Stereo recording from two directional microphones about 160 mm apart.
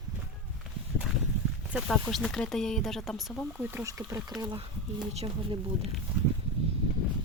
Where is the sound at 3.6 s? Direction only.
15° right (ahead or behind).